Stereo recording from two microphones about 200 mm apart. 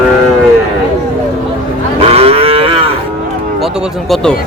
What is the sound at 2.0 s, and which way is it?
Cattle, 30° right (ahead or behind).